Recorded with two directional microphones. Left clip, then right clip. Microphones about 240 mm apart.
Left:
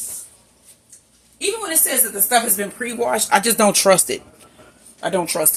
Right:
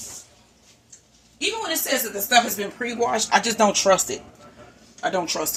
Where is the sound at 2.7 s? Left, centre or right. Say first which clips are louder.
Left 2 dB; left.